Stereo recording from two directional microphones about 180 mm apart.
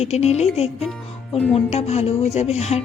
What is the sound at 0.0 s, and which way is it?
A woman's voice, 35° left (ahead or behind).